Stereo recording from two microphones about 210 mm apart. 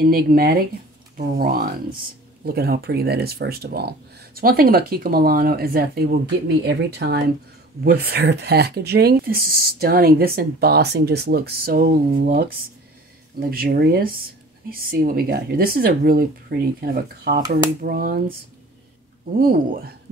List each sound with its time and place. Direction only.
0.0 s speech: 45° right (ahead or behind)
19.3 s speech: 45° right (ahead or behind)